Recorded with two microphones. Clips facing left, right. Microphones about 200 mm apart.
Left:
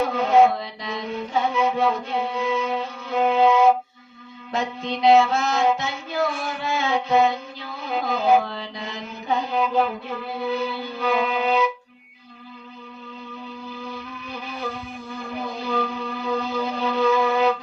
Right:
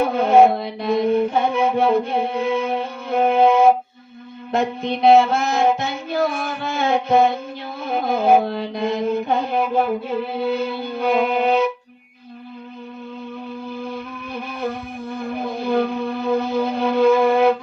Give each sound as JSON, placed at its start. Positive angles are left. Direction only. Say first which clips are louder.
{"t": 0.0, "sound": "mantra", "louder": "right 4 dB", "side_deg": -60}
{"t": 4.5, "sound": "child singing", "louder": "right 5 dB", "side_deg": -55}
{"t": 7.8, "sound": "music", "louder": "right 4 dB", "side_deg": -55}
{"t": 8.4, "sound": "child singing", "louder": "right 10 dB", "side_deg": -55}
{"t": 13.7, "sound": "music", "louder": "right 5 dB", "side_deg": -55}